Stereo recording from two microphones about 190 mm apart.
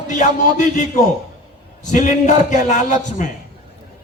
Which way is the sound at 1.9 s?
40° left (ahead or behind).